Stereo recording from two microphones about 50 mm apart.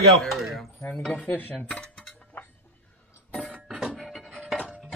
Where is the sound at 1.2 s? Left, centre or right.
Left.